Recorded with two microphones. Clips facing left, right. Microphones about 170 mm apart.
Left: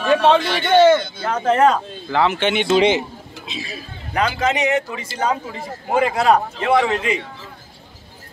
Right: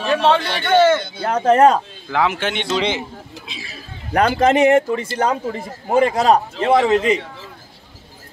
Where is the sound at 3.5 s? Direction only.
20° left (ahead or behind).